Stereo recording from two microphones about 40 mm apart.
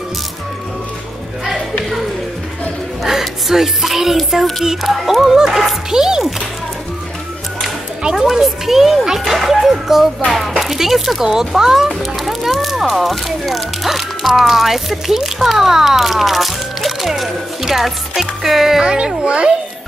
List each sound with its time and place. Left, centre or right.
1.4 s a sound: centre
3.0 s music: centre
4.3 s a child's voice: centre
8.0 s a child's voice: centre
18.9 s a child's voice: right